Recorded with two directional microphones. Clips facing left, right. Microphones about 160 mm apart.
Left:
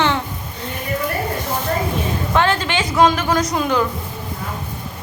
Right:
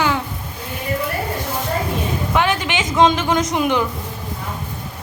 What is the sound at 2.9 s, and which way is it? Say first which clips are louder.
Speech: even; 20° right (ahead or behind).